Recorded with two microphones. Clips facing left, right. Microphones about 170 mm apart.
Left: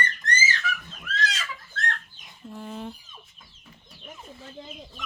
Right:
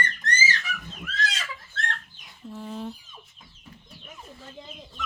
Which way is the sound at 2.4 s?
Centre (ahead or behind).